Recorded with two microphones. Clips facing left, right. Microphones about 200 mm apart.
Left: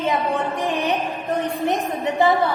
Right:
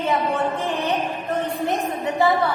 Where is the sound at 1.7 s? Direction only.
15° left (ahead or behind).